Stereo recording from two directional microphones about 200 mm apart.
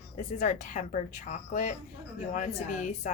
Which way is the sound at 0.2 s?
40° left (ahead or behind).